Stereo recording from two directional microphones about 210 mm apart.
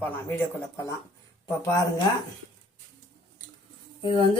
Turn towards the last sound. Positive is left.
turn(degrees=25)  # may be behind; listen again after turning